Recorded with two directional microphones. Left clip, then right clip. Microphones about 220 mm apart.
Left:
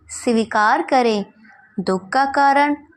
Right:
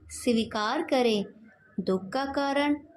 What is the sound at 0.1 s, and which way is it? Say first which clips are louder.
Speech: left 9 dB; 10° left (ahead or behind).